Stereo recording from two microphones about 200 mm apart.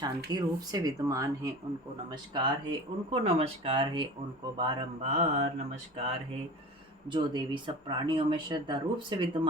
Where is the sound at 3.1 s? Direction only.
30° right (ahead or behind).